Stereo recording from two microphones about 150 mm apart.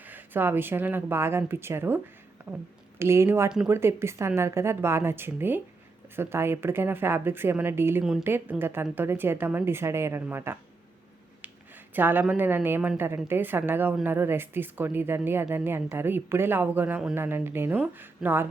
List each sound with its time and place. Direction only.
0.0 s speech: 10° right (ahead or behind)
3.0 s speech: 15° right (ahead or behind)
11.9 s speech: 10° right (ahead or behind)